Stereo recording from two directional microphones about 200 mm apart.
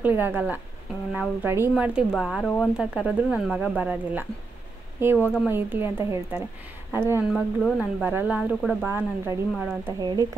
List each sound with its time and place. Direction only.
0.0 s speech: 10° right (ahead or behind)
7.2 s speech: centre (ahead or behind); by 10.2 s 20° right (ahead or behind)